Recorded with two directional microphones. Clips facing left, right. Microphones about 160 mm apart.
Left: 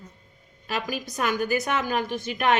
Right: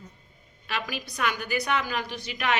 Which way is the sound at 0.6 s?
40° left (ahead or behind).